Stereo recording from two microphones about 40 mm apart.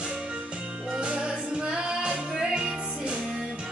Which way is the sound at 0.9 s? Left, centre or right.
Right.